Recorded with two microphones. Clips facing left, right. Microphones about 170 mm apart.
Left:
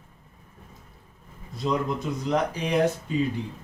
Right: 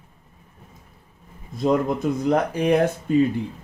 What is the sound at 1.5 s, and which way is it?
Speech, 50° right (ahead or behind).